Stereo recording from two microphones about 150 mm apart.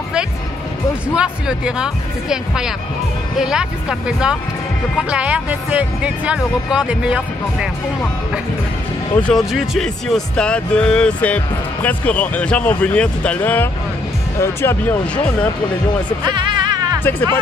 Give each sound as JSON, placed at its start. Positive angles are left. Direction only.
{"t": 1.1, "sound": "speech", "side_deg": -5}
{"t": 5.1, "sound": "speech", "side_deg": -10}
{"t": 9.1, "sound": "speech", "side_deg": 5}
{"t": 16.3, "sound": "music", "side_deg": -30}